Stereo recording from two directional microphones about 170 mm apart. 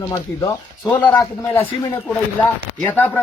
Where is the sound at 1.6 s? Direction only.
10° left (ahead or behind).